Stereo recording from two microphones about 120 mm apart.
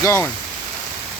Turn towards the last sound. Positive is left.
turn(degrees=25)  # may be behind; listen again after turning